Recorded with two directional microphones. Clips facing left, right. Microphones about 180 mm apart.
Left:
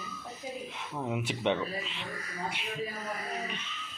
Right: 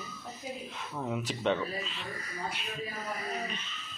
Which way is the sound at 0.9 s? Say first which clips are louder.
Left 1 dB; 15° left (ahead or behind).